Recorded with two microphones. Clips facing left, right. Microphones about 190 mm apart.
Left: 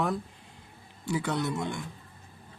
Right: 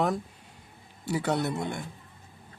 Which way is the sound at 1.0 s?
65° right (ahead or behind).